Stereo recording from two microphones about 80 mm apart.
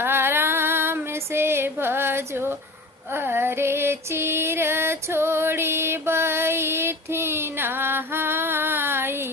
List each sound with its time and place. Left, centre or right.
0.0 s female singing: right